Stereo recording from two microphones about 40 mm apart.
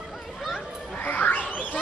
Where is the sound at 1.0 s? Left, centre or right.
Left.